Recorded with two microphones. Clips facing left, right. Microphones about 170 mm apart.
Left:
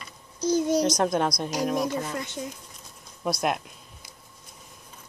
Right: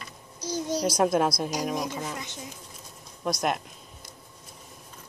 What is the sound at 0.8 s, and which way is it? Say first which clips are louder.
Speech: right 1 dB; 5° right (ahead or behind).